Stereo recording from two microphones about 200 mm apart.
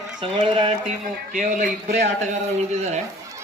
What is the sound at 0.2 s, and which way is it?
Speech, 25° right (ahead or behind).